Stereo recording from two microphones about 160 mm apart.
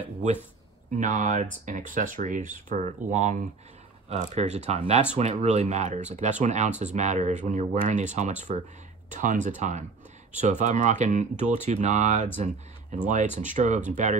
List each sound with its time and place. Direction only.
0.9 s speech: 50° right (ahead or behind)